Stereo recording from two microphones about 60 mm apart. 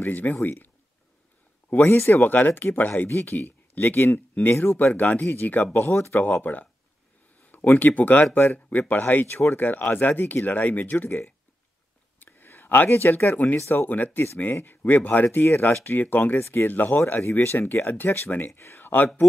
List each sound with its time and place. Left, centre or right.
0.0 s speech: left
1.9 s speech: left
2.2 s speech: left
5.9 s speech: left
12.2 s speech: left
16.3 s speech: left
18.5 s speech: left
18.8 s a sound: left